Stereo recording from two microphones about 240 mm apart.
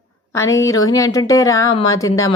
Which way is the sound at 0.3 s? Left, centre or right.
Centre.